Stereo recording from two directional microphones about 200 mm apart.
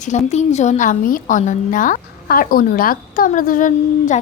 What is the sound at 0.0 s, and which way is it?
A woman's voice, 35° left (ahead or behind).